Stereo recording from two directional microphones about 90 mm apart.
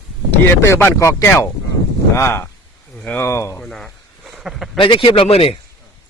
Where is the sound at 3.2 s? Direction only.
35° left (ahead or behind).